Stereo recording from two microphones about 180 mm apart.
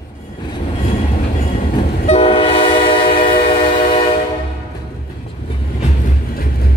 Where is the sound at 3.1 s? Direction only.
50° left (ahead or behind).